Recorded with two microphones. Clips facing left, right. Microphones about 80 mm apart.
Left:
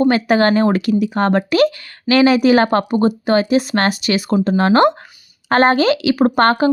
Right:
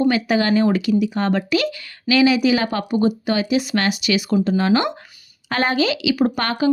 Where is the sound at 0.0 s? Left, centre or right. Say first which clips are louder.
Left 4 dB; left.